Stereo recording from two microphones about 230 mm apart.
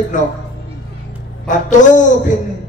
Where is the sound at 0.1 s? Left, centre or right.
Left.